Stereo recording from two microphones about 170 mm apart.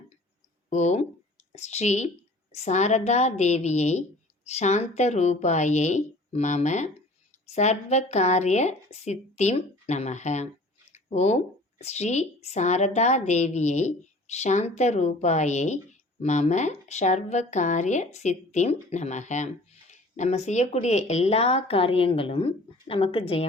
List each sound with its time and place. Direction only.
0.7 s speech: 45° left (ahead or behind)